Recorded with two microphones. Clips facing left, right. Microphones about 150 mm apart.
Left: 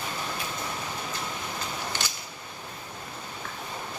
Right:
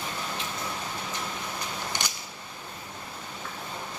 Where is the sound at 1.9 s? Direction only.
15° right (ahead or behind).